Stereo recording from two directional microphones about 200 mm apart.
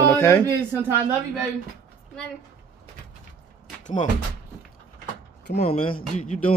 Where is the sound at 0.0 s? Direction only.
10° left (ahead or behind).